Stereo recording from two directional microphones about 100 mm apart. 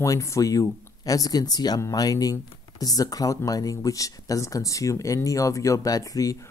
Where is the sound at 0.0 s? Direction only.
30° left (ahead or behind).